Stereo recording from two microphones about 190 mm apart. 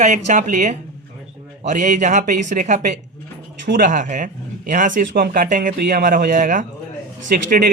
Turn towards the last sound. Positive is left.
turn(degrees=-45)  # may be behind; listen again after turning